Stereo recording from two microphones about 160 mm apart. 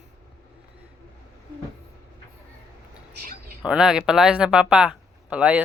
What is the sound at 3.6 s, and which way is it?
Speech, 5° right (ahead or behind).